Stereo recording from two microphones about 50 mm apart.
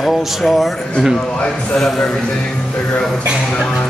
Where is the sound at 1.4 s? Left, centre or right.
Centre.